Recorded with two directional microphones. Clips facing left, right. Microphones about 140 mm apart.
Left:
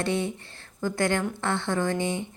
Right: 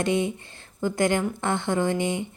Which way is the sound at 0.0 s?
15° right (ahead or behind).